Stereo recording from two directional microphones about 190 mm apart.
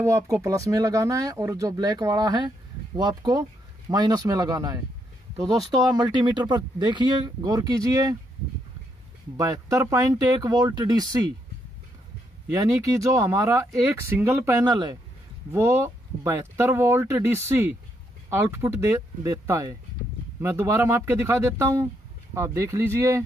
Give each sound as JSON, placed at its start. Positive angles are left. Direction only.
{"t": 0.0, "sound": "speech", "side_deg": -15}
{"t": 9.4, "sound": "speech", "side_deg": -15}
{"t": 12.7, "sound": "speech", "side_deg": -15}